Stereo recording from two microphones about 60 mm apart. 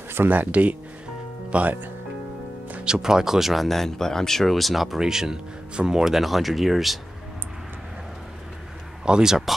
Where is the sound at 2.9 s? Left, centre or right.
Centre.